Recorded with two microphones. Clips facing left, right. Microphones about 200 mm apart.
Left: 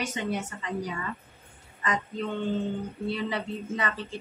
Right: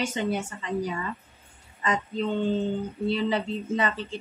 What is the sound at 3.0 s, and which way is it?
Speech, 25° right (ahead or behind).